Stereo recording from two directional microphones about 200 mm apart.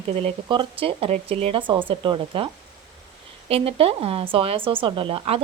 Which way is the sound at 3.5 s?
30° right (ahead or behind).